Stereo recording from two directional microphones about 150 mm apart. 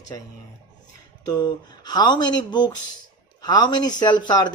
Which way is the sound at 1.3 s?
25° left (ahead or behind).